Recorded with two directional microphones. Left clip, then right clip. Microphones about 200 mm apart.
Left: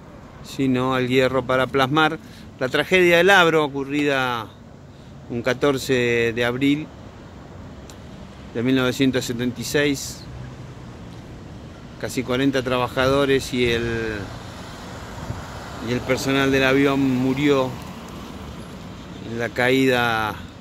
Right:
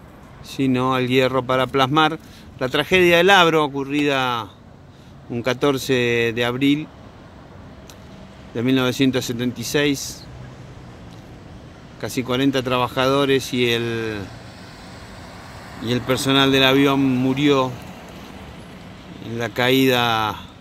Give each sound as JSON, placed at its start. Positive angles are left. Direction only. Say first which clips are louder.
{"t": 0.5, "sound": "speech", "louder": "right 2 dB", "side_deg": -15}
{"t": 8.5, "sound": "speech", "louder": "right 1 dB", "side_deg": -20}
{"t": 12.0, "sound": "speech", "louder": "right 1 dB", "side_deg": -20}
{"t": 15.3, "sound": "vehicle", "louder": "left 3 dB", "side_deg": 15}
{"t": 15.9, "sound": "speech", "louder": "right 2 dB", "side_deg": -30}
{"t": 19.3, "sound": "speech", "louder": "right 1 dB", "side_deg": -20}